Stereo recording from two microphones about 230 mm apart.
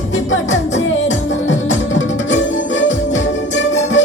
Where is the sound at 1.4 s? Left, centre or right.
Left.